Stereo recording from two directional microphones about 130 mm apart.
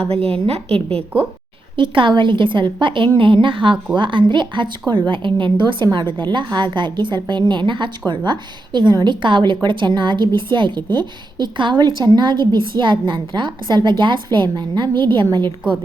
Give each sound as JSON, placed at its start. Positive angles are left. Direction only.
{"t": 0.1, "sound": "a woman's voice", "side_deg": -50}